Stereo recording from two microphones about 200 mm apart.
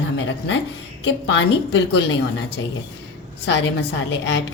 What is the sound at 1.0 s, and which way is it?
A woman's voice, 60° left (ahead or behind).